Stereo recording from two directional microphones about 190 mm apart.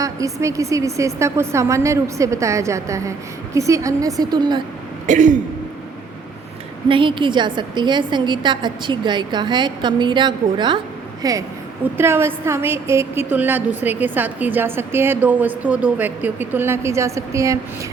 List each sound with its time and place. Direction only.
0.0 s a woman's voice: 15° right (ahead or behind)
5.0 s a sound: 40° right (ahead or behind)
6.8 s a woman's voice: 25° right (ahead or behind)